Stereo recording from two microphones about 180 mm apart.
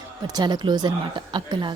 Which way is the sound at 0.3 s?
25° right (ahead or behind).